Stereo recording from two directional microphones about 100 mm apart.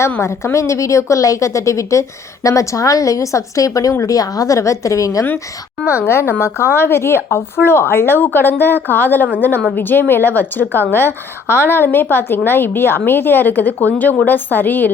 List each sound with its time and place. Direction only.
0.2 s a woman's voice: 25° left (ahead or behind)